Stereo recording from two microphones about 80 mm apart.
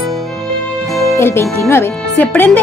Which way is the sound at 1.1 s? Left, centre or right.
Left.